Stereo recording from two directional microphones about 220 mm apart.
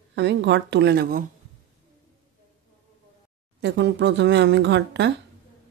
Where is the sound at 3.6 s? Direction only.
50° right (ahead or behind).